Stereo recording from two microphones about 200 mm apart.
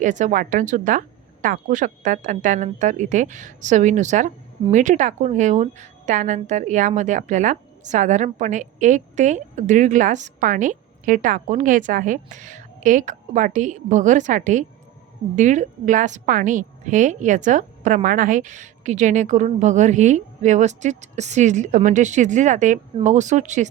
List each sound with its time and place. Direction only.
0.0 s a woman's voice: 40° right (ahead or behind)